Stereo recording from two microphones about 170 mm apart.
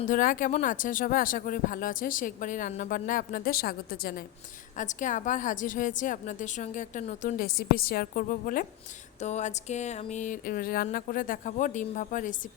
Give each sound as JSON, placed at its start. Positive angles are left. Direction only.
{"t": 0.1, "sound": "speech", "side_deg": 50}
{"t": 4.8, "sound": "speech", "side_deg": 50}
{"t": 9.2, "sound": "speech", "side_deg": 40}